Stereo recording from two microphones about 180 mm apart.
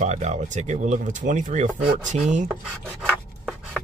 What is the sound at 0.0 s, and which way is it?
Speech, 40° right (ahead or behind).